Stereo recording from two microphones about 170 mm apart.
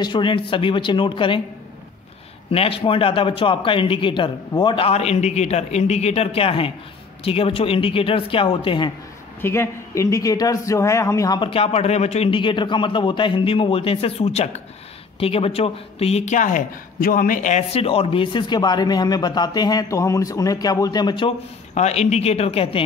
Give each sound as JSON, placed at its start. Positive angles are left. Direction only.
{"t": 0.0, "sound": "speech", "side_deg": 30}
{"t": 2.5, "sound": "a man's voice", "side_deg": 35}
{"t": 9.4, "sound": "speech", "side_deg": 15}
{"t": 21.7, "sound": "a man's voice", "side_deg": 40}